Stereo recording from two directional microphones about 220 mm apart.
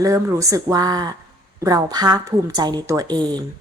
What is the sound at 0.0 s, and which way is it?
A woman's voice, 15° right (ahead or behind).